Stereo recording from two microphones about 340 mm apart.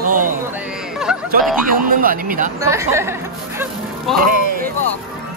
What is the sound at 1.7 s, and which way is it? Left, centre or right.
Speech, right.